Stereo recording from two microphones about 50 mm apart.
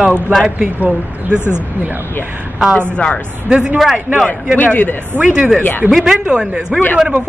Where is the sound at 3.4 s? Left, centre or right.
Centre.